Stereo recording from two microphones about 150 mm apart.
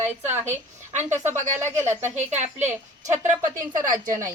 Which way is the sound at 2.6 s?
15° right (ahead or behind).